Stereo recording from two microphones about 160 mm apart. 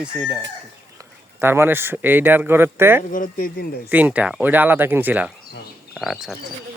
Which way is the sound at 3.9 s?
10° right (ahead or behind).